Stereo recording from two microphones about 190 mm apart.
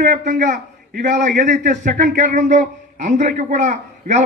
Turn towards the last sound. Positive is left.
turn(degrees=-40)  # may be behind; listen again after turning